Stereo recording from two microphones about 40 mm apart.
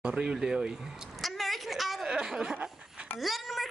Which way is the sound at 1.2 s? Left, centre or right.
Centre.